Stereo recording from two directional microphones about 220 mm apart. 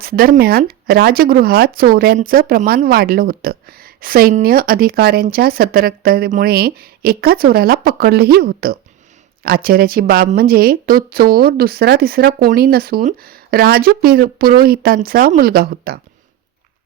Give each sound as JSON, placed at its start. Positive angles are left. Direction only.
{"t": 0.0, "sound": "speech", "side_deg": -45}